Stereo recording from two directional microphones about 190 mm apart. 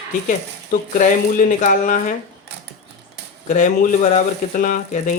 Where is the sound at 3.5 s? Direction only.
40° left (ahead or behind).